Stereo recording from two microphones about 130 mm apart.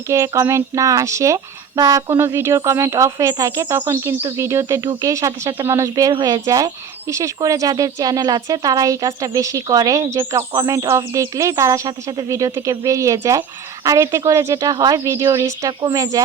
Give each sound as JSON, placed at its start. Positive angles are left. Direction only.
{"t": 0.1, "sound": "speech", "side_deg": -25}